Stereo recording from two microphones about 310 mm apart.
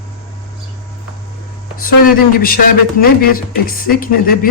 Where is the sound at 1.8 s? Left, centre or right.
Left.